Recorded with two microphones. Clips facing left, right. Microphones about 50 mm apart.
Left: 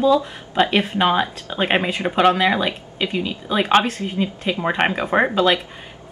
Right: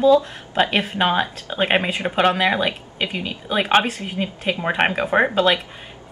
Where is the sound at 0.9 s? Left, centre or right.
Centre.